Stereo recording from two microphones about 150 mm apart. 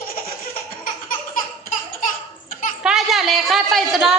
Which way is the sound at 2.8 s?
5° right (ahead or behind).